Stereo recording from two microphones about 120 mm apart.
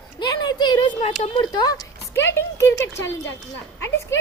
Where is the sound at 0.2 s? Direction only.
35° left (ahead or behind).